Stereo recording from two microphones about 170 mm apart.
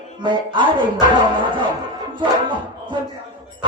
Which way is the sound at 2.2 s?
30° right (ahead or behind).